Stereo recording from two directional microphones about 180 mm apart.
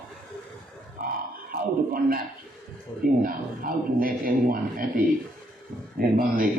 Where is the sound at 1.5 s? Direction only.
55° right (ahead or behind).